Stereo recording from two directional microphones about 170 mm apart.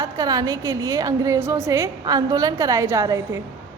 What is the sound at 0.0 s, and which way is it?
A woman's voice, 20° right (ahead or behind).